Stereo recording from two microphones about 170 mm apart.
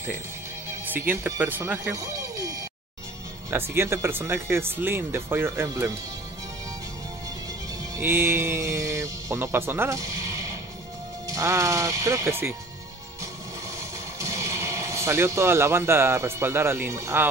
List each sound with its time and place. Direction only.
0.7 s speech: 10° right (ahead or behind)
7.9 s speech: 15° right (ahead or behind)
13.7 s speech: 15° right (ahead or behind)